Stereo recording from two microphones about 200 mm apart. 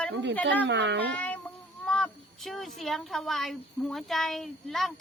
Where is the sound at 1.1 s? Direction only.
10° left (ahead or behind).